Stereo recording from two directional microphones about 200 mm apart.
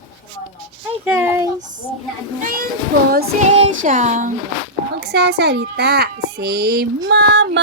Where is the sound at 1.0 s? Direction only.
10° right (ahead or behind).